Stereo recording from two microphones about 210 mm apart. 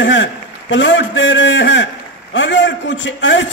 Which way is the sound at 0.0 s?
60° left (ahead or behind).